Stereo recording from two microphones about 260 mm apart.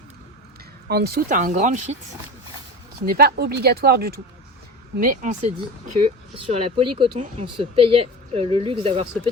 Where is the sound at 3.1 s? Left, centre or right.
Right.